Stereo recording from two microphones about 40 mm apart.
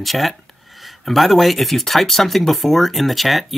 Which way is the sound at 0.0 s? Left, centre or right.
Centre.